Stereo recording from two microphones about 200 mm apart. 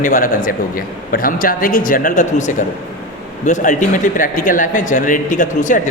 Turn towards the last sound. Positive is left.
turn(degrees=40)  # may be behind; listen again after turning